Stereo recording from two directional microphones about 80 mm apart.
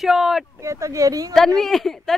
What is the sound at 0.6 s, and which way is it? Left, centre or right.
Speech, right.